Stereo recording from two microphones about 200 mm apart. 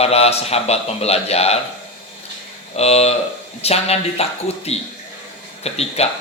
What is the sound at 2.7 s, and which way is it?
Speech, 30° left (ahead or behind).